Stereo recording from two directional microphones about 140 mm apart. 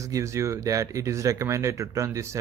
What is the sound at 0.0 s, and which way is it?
Speech, 20° right (ahead or behind).